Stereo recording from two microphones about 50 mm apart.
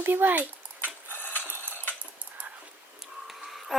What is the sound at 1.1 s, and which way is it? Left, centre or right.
Sewing machine, left.